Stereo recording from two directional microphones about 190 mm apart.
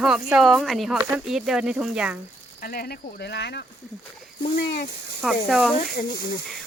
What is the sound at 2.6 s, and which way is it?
Speech, 55° left (ahead or behind).